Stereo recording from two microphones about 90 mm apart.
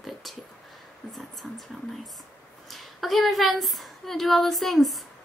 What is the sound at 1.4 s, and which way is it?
Speech, 15° left (ahead or behind).